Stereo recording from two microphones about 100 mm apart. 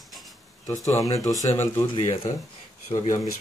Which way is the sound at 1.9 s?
55° left (ahead or behind).